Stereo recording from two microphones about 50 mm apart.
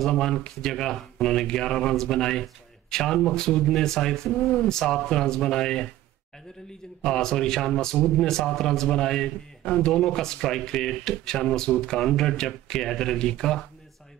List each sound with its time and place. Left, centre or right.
0.0 s a man's voice: centre
7.1 s a man's voice: centre